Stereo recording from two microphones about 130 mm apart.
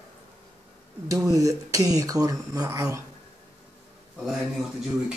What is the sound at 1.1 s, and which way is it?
Speech, 25° right (ahead or behind).